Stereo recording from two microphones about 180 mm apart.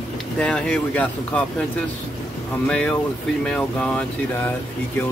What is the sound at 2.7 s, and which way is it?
Speech, 5° left (ahead or behind).